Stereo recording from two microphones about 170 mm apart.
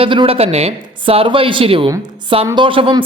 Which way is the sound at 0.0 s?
30° right (ahead or behind).